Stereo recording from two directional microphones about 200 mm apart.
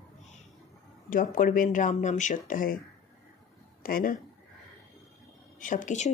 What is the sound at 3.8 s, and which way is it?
Speech, 45° left (ahead or behind).